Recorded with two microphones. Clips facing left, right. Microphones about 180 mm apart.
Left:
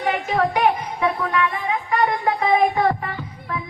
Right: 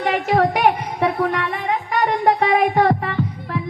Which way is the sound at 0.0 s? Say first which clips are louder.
Right 3 dB; 75° right (ahead or behind).